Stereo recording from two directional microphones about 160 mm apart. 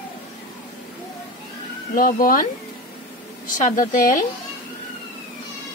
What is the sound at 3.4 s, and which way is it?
Speech, 55° left (ahead or behind).